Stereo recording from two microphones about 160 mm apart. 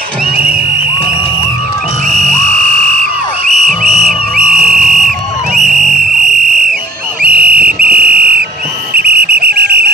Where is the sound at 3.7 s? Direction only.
Centre (ahead or behind).